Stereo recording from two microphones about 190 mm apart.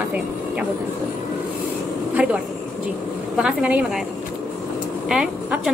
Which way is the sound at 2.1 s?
5° right (ahead or behind).